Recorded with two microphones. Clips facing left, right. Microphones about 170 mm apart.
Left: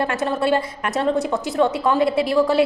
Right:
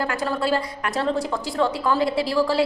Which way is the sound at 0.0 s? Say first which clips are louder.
Left 3 dB; 25° left (ahead or behind).